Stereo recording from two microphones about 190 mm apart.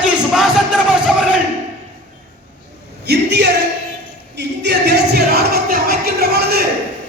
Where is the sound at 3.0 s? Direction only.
65° right (ahead or behind).